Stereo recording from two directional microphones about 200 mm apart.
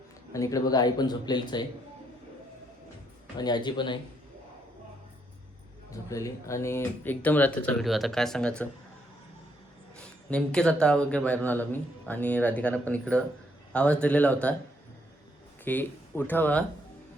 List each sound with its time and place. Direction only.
0.3 s speech: 15° left (ahead or behind)
3.3 s speech: 20° left (ahead or behind)
5.9 s speech: 15° left (ahead or behind)
10.0 s speech: 5° left (ahead or behind)
15.6 s speech: 10° left (ahead or behind)